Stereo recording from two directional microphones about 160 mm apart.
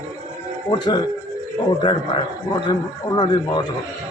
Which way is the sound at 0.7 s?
25° left (ahead or behind).